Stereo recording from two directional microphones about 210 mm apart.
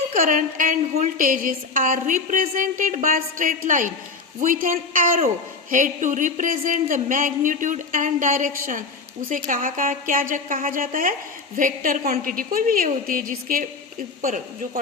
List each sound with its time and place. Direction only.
0.1 s a woman's voice: 40° right (ahead or behind)